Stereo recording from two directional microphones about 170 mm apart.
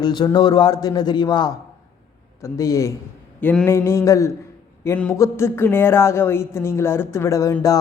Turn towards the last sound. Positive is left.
turn(degrees=20)  # may be behind; listen again after turning